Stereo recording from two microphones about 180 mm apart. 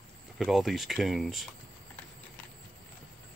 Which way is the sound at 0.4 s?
Centre (ahead or behind).